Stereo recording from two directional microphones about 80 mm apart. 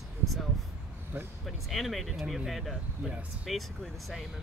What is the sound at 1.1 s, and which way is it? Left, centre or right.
Speech, right.